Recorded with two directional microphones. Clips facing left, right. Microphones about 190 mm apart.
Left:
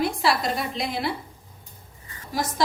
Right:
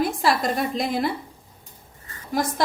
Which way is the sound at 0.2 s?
45° right (ahead or behind).